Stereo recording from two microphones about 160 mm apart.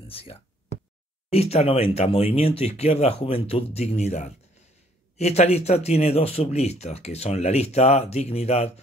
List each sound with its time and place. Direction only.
0.1 s speech: 40° left (ahead or behind)